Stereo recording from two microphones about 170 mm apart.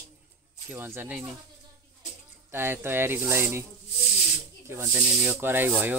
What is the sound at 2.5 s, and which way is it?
Speech, 15° right (ahead or behind).